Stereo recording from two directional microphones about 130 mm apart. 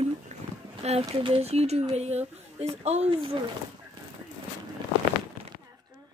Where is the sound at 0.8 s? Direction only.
55° right (ahead or behind).